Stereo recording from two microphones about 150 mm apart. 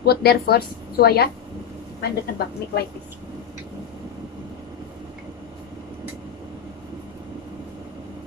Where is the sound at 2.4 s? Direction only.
90° left.